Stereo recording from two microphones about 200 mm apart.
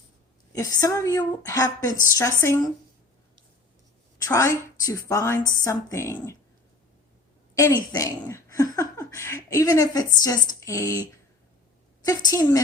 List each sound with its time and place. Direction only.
0.5 s a woman's voice: 15° left (ahead or behind)
4.3 s a woman's voice: 15° left (ahead or behind)
7.5 s a woman's voice: 15° left (ahead or behind)